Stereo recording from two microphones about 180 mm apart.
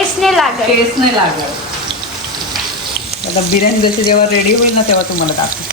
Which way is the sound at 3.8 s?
55° left (ahead or behind).